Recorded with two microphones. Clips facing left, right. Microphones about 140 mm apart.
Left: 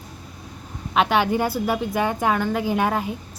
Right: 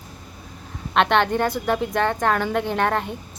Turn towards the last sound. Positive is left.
turn(degrees=5)  # may be behind; listen again after turning